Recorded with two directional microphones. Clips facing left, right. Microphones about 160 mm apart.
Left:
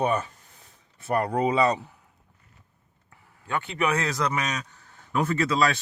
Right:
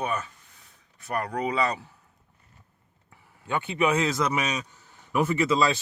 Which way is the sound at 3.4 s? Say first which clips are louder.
Right 2 dB; 20° right (ahead or behind).